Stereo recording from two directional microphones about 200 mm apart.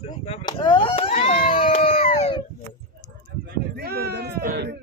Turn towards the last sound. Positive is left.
turn(degrees=-55)  # may be behind; listen again after turning